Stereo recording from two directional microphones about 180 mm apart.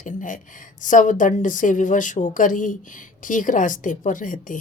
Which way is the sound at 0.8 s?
45° left (ahead or behind).